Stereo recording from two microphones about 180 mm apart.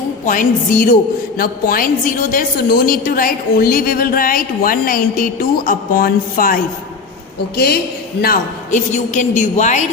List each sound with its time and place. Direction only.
0.3 s a woman's voice: 50° left (ahead or behind)